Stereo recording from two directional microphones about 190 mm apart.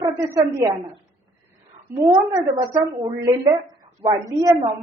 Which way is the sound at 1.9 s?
10° right (ahead or behind).